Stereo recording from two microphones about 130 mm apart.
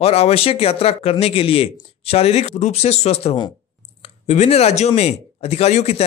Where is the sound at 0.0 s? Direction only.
50° left (ahead or behind).